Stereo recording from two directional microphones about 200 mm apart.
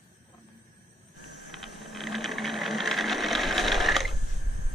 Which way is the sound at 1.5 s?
Centre (ahead or behind).